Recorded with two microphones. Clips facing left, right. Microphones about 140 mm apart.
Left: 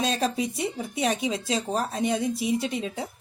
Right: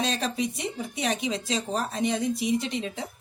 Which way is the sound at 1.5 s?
35° left (ahead or behind).